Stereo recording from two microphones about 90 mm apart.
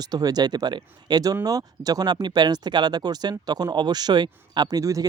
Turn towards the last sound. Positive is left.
turn(degrees=-40)  # may be behind; listen again after turning